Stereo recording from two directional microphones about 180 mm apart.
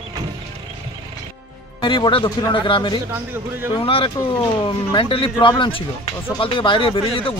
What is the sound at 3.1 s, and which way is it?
Speech, 10° right (ahead or behind).